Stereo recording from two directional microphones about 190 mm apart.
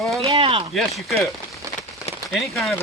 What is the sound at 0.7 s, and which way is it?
Speech, centre (ahead or behind).